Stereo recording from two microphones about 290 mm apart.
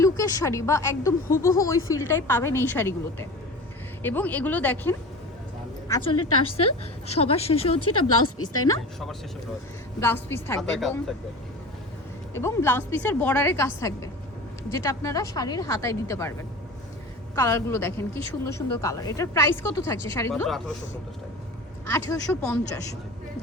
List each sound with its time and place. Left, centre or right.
0.0 s speech: centre
6.1 s a woman's voice: left
7.1 s a woman's voice: left
7.9 s a woman's voice: left
10.0 s speech: centre
12.3 s speech: centre
17.3 s speech: centre
21.8 s speech: centre